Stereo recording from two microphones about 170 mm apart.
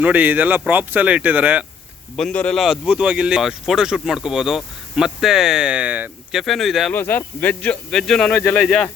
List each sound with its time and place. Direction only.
0.0 s speech: 10° right (ahead or behind)
2.1 s speech: 5° left (ahead or behind)
6.9 s speech: 10° left (ahead or behind)